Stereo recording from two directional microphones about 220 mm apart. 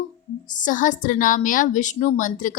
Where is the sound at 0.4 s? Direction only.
35° left (ahead or behind).